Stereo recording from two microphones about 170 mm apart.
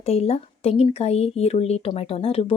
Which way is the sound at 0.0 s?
35° left (ahead or behind).